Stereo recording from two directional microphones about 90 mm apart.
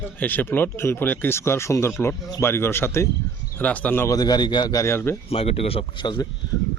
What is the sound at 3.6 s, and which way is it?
Speech, 15° left (ahead or behind).